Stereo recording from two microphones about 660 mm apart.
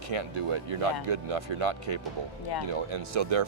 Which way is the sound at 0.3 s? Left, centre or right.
Right.